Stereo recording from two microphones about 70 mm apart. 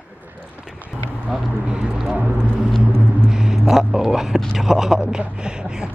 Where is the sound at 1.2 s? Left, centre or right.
Centre.